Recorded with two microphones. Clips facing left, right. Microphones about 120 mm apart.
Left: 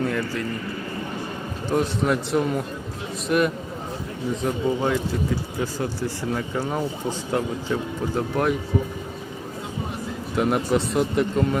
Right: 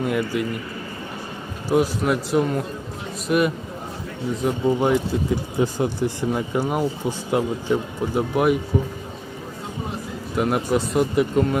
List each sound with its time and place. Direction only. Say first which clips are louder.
0.0 s speech: right 2 dB; 15° right (ahead or behind)
1.7 s a man's voice: right 2 dB; 5° right (ahead or behind)
4.8 s a man's voice: right 3 dB; 20° right (ahead or behind)
10.3 s a man's voice: even; centre (ahead or behind)